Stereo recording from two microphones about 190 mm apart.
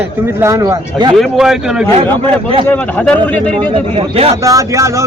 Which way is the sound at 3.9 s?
30° right (ahead or behind).